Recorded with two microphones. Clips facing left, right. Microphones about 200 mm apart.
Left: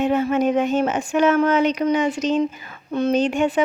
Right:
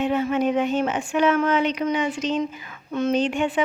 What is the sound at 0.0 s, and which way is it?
Speech, 45° left (ahead or behind).